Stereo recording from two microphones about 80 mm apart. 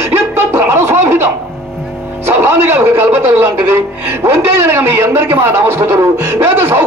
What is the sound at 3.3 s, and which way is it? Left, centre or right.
Speech, right.